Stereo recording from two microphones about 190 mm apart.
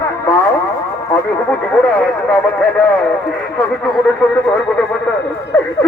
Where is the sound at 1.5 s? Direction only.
10° left (ahead or behind).